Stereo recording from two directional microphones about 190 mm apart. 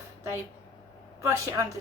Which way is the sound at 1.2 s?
15° right (ahead or behind).